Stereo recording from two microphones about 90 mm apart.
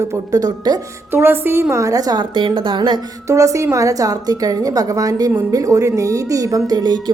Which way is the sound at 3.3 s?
35° right (ahead or behind).